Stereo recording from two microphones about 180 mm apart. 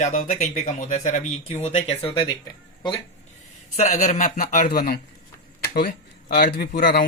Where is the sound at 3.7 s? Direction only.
45° left (ahead or behind).